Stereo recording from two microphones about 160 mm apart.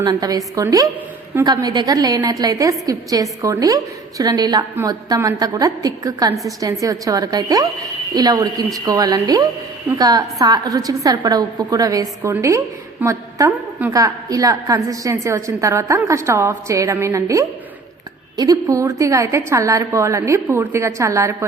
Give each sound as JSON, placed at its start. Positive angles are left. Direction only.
{"t": 0.0, "sound": "a woman's voice", "side_deg": -25}